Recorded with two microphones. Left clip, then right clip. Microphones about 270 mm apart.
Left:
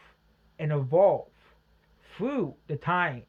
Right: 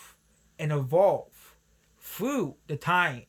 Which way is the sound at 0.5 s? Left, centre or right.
Centre.